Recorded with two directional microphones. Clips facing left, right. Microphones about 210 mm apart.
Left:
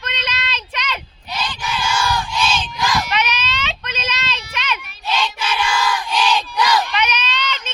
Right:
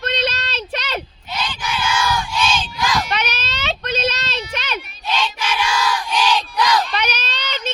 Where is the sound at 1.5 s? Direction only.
5° right (ahead or behind).